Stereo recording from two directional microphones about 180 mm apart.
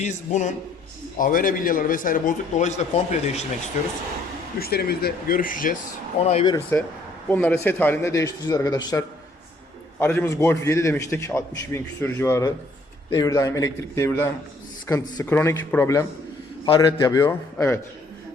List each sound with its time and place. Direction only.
0.0 s a man's voice: 40° left (ahead or behind)
4.6 s speech: 60° left (ahead or behind)
6.1 s a man's voice: 35° left (ahead or behind)
6.7 s a man's voice: 15° left (ahead or behind)
16.6 s a man's voice: 25° left (ahead or behind)